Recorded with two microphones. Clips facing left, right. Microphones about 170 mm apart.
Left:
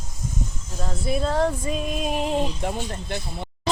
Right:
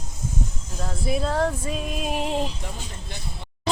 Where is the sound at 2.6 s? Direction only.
55° left (ahead or behind).